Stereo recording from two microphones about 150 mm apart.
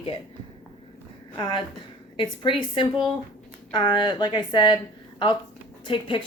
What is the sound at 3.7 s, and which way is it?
Speech, 30° left (ahead or behind).